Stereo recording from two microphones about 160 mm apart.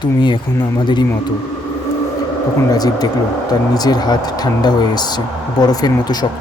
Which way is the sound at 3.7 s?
25° left (ahead or behind).